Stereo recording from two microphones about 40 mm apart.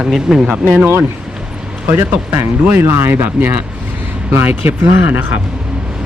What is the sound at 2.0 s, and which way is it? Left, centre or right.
Speech, right.